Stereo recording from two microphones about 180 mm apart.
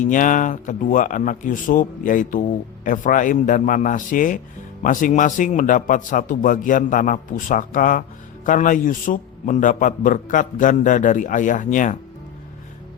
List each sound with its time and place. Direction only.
0.0 s speech: 45° left (ahead or behind)